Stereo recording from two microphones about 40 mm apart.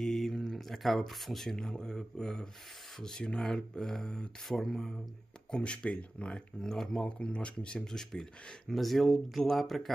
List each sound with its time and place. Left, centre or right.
0.0 s speech: centre; by 4.3 s left
4.5 s speech: centre
5.5 s speech: left
6.6 s speech: centre
7.1 s speech: left
7.8 s speech: centre
8.6 s speech: centre